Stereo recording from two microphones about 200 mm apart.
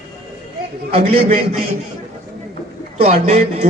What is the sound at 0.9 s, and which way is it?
Speech, 30° right (ahead or behind).